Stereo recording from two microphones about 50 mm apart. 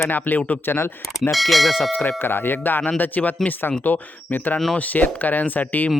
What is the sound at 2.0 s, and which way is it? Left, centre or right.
Speech, left.